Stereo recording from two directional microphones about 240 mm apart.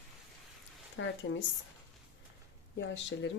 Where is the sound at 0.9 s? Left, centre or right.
Left.